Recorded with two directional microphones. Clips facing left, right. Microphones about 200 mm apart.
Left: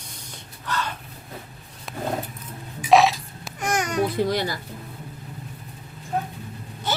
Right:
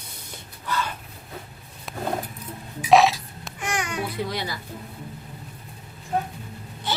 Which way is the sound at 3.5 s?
40° left (ahead or behind).